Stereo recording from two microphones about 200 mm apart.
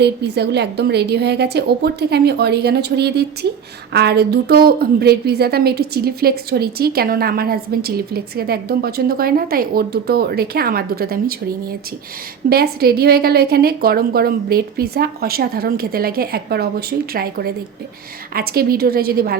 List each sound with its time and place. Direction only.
0.0 s a woman's voice: 55° right (ahead or behind)